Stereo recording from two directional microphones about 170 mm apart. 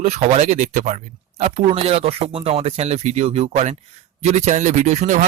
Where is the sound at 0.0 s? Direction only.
40° right (ahead or behind).